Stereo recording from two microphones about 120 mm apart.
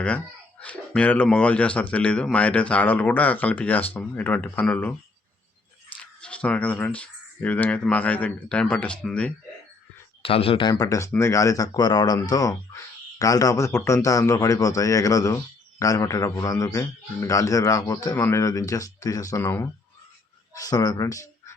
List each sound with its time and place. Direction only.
0.6 s speech: 10° left (ahead or behind)
6.0 s speech: 10° left (ahead or behind)
10.2 s speech: 50° left (ahead or behind)
10.7 s speech: 25° left (ahead or behind)
19.4 s speech: 15° left (ahead or behind)
20.5 s speech: 30° left (ahead or behind)